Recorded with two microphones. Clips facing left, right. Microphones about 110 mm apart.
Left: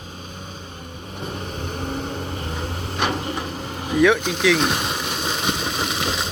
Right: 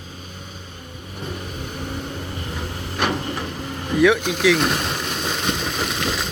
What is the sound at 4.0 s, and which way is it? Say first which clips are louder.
Vehicle: right 1 dB; 5° right (ahead or behind).